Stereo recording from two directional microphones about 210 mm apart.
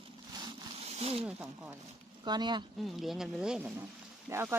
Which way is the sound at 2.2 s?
20° right (ahead or behind).